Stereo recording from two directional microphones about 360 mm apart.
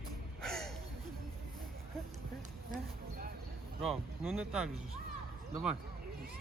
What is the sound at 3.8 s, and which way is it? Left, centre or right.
Speech, centre.